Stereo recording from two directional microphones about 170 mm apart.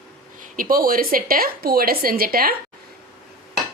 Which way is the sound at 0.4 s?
55° right (ahead or behind).